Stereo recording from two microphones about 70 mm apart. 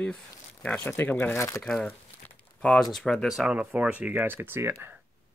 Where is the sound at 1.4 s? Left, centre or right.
Left.